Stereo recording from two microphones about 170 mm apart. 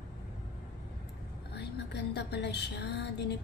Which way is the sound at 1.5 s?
80° left.